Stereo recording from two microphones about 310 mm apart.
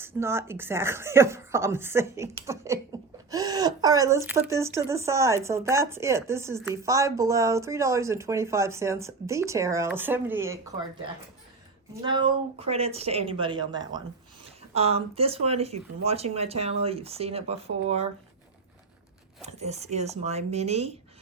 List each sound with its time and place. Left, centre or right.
0.0 s speech: centre
12.0 s speech: centre
19.4 s speech: right